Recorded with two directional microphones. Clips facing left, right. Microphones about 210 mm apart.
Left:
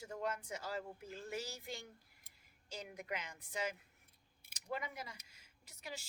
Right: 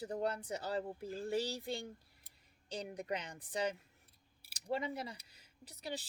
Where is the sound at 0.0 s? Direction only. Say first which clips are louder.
Right 5 dB; 35° right (ahead or behind).